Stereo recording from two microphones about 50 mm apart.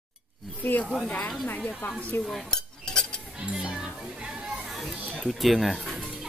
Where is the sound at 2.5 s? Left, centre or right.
Centre.